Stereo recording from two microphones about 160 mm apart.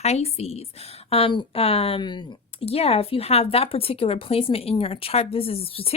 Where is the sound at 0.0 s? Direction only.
40° left (ahead or behind).